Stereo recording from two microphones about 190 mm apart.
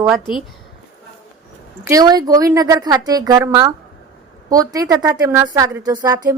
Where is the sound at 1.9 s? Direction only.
20° right (ahead or behind).